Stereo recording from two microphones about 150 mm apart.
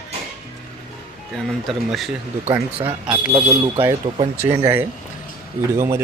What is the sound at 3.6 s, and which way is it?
Speech, 20° right (ahead or behind).